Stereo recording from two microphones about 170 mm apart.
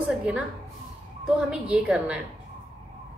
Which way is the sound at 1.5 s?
5° right (ahead or behind).